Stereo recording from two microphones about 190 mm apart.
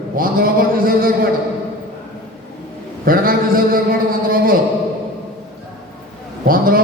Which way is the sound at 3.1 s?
50° right (ahead or behind).